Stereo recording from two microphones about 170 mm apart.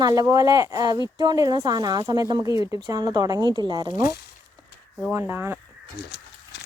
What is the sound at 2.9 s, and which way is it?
Speech, 20° right (ahead or behind).